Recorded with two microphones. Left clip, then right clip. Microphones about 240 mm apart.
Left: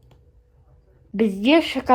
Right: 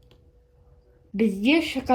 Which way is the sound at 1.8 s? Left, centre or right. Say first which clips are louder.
Left 5 dB; left.